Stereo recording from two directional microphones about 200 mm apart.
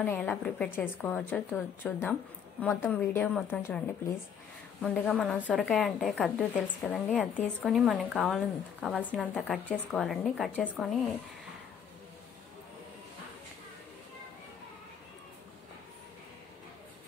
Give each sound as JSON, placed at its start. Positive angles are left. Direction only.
{"t": 0.0, "sound": "a woman's voice", "side_deg": 10}
{"t": 4.8, "sound": "a woman's voice", "side_deg": 5}